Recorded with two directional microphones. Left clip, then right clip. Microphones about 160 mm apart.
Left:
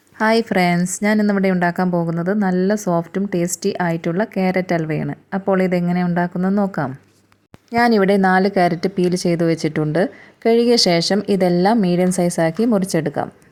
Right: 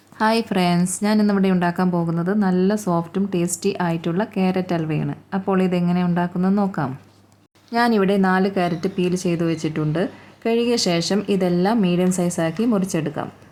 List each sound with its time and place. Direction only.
0.2 s a woman's voice: 35° left (ahead or behind)